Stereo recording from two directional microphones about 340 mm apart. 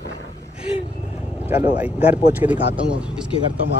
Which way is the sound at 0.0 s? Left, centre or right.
Right.